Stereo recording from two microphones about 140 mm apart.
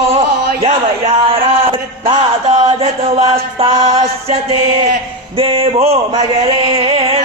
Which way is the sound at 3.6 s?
45° right (ahead or behind).